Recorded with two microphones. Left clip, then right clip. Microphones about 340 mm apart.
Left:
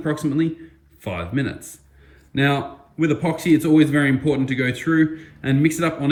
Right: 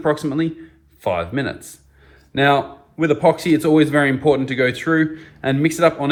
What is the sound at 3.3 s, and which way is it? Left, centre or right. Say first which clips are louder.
Speech: right 2 dB; centre.